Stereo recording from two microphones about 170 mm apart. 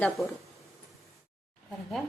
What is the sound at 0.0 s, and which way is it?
Speech, centre (ahead or behind).